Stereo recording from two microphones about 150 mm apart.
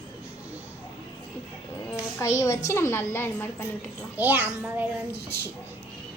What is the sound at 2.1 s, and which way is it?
A child's voice, 20° left (ahead or behind).